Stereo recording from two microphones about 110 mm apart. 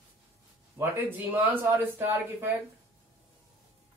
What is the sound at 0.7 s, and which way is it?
Speech, 15° right (ahead or behind).